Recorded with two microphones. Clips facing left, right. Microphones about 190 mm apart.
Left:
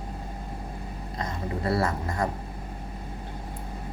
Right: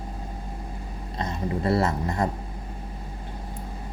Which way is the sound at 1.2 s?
25° right (ahead or behind).